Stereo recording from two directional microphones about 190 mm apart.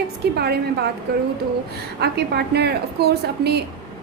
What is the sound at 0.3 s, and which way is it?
Speech, 60° right (ahead or behind).